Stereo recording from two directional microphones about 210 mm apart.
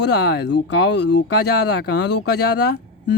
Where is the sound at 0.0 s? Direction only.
50° left (ahead or behind).